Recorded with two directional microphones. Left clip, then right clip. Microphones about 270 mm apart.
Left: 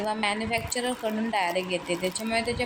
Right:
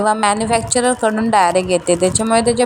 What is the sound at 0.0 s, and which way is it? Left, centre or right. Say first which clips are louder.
A woman's voice: right 13 dB; right.